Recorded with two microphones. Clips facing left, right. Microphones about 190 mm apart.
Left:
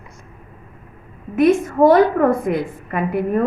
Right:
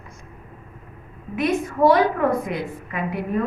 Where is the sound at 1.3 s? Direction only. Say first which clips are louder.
Left 7 dB; 50° left (ahead or behind).